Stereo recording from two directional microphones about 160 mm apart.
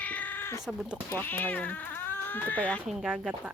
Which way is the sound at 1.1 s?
10° left (ahead or behind).